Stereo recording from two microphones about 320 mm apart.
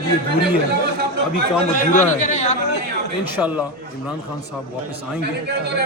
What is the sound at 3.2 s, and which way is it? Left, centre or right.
Speech, centre.